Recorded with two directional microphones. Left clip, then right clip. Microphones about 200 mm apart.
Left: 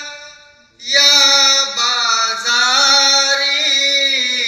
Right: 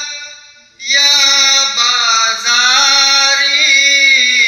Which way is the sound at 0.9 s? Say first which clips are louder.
Right 1 dB; 60° left (ahead or behind).